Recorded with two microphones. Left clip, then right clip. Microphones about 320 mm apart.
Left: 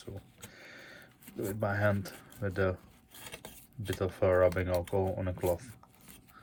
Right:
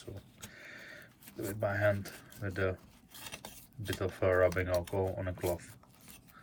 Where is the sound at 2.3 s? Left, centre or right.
Centre.